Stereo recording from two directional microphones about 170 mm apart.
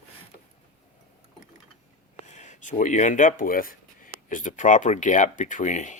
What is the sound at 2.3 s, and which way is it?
Speech, 45° left (ahead or behind).